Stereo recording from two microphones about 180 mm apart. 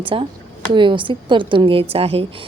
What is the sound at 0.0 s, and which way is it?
A woman's voice, 30° right (ahead or behind).